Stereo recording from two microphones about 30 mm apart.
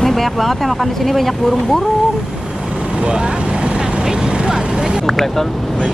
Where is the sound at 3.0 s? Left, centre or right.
Right.